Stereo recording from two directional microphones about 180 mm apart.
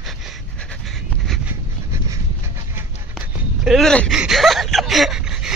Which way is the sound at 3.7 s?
Centre (ahead or behind).